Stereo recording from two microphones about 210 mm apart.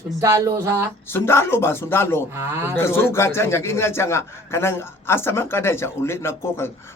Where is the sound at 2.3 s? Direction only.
10° right (ahead or behind).